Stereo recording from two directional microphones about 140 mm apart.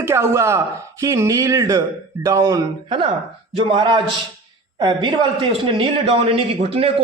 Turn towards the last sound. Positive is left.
turn(degrees=-40)  # may be behind; listen again after turning